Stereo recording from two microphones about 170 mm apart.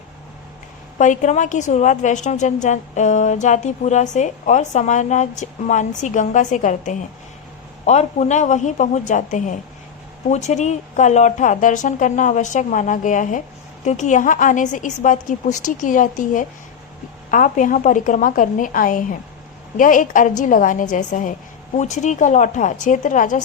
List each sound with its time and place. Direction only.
0.9 s a woman's voice: 45° left (ahead or behind)